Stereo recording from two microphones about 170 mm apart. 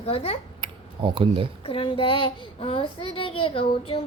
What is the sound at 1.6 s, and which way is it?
A child's voice, 30° left (ahead or behind).